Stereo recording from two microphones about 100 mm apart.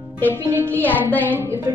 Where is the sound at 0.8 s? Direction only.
15° left (ahead or behind).